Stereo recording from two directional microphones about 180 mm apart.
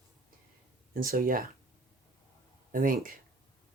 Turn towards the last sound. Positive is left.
turn(degrees=-50)  # may be behind; listen again after turning